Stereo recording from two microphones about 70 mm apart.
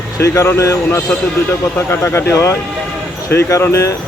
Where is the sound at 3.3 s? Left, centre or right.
Left.